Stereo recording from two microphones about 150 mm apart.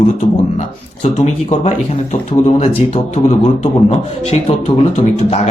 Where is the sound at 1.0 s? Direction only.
50° left (ahead or behind).